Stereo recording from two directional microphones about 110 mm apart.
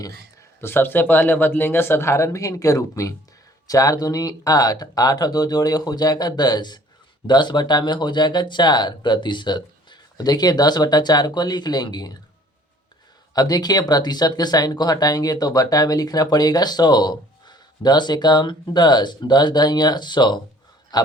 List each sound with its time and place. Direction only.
0.6 s speech: 20° left (ahead or behind); by 12.1 s 40° left (ahead or behind)
13.3 s speech: 35° left (ahead or behind)